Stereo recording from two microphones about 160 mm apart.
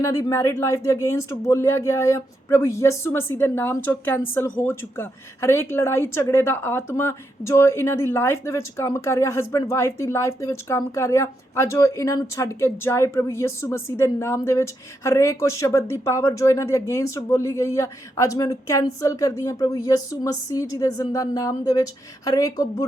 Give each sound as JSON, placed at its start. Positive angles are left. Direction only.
{"t": 0.0, "sound": "a woman's voice", "side_deg": 20}